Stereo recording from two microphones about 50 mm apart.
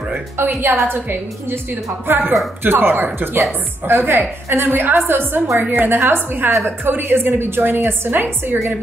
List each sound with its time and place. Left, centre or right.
0.1 s a woman's voice: right